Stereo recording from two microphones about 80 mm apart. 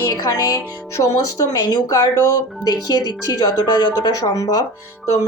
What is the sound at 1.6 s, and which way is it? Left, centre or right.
Speech, left.